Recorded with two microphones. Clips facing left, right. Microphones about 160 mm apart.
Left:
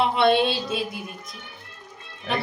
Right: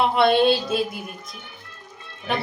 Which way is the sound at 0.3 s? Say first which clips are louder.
Right 2 dB; centre (ahead or behind).